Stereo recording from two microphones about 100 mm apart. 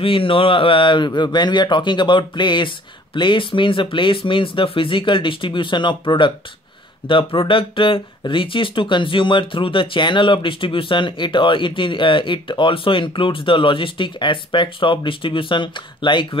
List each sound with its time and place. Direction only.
0.0 s speech: 60° left (ahead or behind)